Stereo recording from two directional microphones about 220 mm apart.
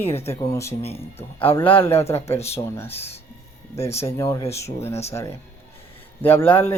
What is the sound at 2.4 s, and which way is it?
Speech, 10° left (ahead or behind).